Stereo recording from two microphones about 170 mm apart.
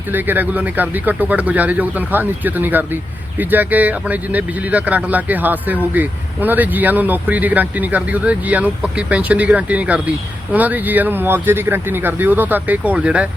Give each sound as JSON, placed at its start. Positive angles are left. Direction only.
{"t": 0.1, "sound": "speech", "side_deg": -10}